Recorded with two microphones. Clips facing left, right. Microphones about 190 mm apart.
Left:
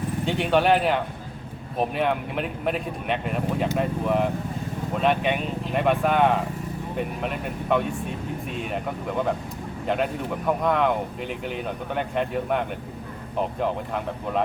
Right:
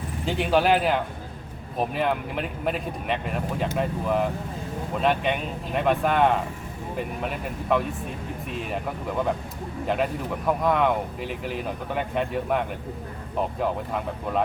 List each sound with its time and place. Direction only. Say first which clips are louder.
0.3 s speech: even; centre (ahead or behind)